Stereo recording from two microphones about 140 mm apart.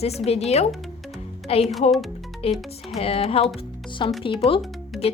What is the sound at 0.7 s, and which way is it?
Music, centre (ahead or behind).